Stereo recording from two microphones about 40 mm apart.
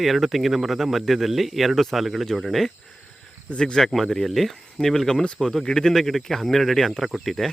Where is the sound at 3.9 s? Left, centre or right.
Centre.